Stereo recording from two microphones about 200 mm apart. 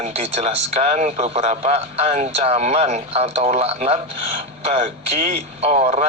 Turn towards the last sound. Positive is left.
turn(degrees=-30)  # may be behind; listen again after turning